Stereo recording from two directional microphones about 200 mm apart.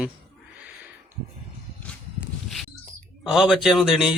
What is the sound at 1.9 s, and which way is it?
Walk, 5° left (ahead or behind).